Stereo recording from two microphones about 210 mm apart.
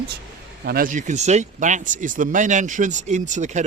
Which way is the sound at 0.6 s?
45° right (ahead or behind).